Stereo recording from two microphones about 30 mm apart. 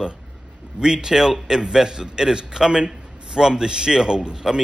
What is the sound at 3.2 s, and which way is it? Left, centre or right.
A man's voice, right.